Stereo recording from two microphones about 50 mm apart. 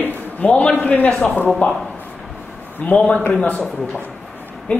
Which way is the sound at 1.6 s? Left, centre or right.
Left.